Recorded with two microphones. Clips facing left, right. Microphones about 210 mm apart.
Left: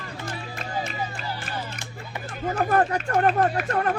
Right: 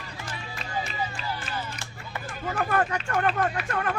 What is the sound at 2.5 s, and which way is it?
Speech, 40° left (ahead or behind).